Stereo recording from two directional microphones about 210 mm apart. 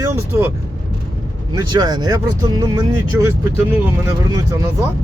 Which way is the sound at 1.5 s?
20° right (ahead or behind).